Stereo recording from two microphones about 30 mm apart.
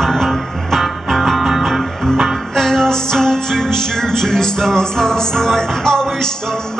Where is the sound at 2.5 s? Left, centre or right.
Centre.